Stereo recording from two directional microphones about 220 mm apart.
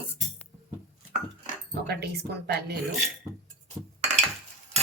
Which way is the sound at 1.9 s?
50° right (ahead or behind).